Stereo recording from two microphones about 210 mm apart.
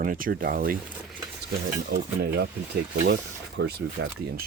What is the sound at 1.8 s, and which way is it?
Speech, 50° right (ahead or behind).